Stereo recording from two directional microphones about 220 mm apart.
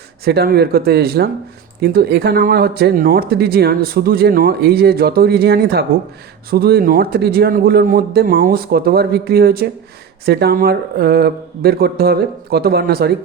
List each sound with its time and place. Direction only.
0.3 s speech: 45° right (ahead or behind)